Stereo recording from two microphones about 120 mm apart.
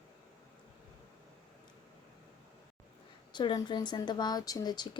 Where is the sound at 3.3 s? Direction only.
40° left (ahead or behind).